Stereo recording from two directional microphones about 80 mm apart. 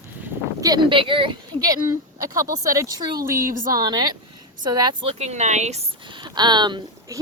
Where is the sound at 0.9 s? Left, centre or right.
Right.